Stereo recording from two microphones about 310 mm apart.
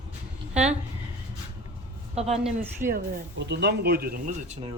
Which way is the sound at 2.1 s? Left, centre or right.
Centre.